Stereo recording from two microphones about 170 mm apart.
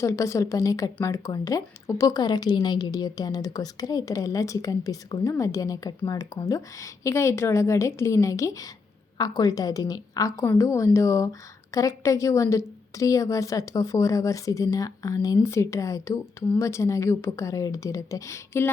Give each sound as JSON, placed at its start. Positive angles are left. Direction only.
{"t": 0.0, "sound": "a woman's voice", "side_deg": 15}